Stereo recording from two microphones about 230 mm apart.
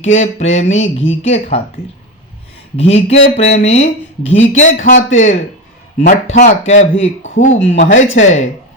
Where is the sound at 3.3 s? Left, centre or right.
Left.